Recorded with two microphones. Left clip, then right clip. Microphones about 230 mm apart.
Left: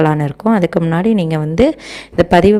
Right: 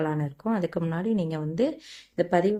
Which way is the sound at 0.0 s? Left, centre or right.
Left.